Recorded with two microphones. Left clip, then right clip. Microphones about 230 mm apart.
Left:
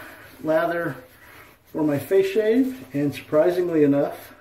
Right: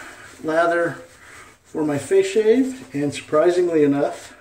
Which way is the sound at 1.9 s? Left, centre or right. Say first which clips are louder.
Right 2 dB; centre.